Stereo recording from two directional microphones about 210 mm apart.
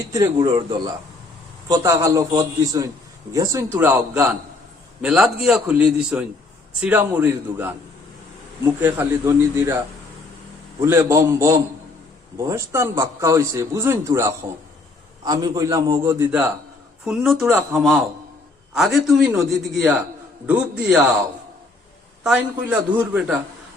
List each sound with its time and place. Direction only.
0.1 s a man's voice: 20° right (ahead or behind); by 20.0 s 5° right (ahead or behind)
22.2 s a man's voice: 5° right (ahead or behind)